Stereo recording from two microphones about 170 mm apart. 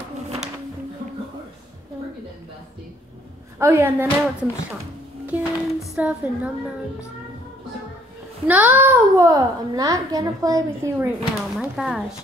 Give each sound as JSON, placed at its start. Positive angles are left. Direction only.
{"t": 3.5, "sound": "speech", "side_deg": -15}
{"t": 8.5, "sound": "a child's voice", "side_deg": -10}
{"t": 11.5, "sound": "speech", "side_deg": 0}